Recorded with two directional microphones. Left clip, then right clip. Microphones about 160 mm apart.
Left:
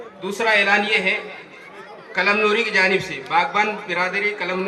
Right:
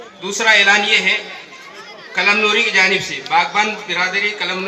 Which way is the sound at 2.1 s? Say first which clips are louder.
Right 4 dB; 45° right (ahead or behind).